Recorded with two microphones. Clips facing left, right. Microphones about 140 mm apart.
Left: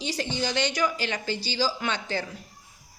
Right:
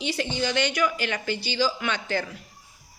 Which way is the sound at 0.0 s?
40° left (ahead or behind).